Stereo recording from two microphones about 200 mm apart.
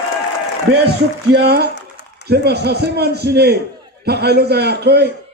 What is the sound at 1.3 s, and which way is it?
A man's voice, 55° right (ahead or behind).